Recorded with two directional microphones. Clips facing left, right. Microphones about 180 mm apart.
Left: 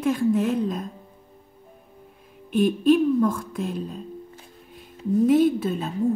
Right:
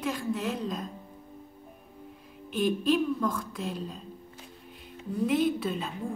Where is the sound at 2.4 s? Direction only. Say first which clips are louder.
Left 7 dB; 50° left (ahead or behind).